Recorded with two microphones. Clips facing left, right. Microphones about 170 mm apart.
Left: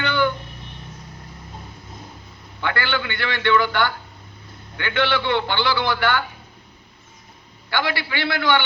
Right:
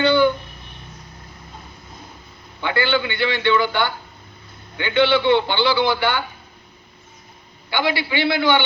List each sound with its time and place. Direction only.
0.0 s a sound: 20° right (ahead or behind)
2.6 s a man's voice: 20° right (ahead or behind)
7.7 s a man's voice: 20° right (ahead or behind)